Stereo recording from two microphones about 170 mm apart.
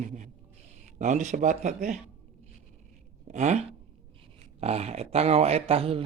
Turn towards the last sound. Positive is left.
turn(degrees=-35)  # may be behind; listen again after turning